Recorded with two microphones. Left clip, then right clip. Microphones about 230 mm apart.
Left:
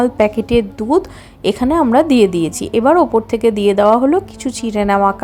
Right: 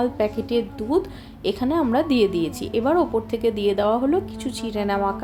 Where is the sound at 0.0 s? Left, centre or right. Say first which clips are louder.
Left 9 dB; left.